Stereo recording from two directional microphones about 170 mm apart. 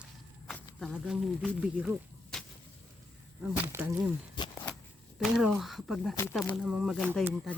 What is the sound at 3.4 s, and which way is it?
Speech, 10° right (ahead or behind).